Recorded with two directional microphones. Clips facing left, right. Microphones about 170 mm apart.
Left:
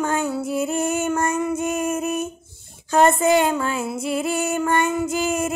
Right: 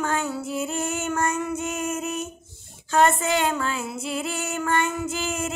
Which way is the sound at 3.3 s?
15° left (ahead or behind).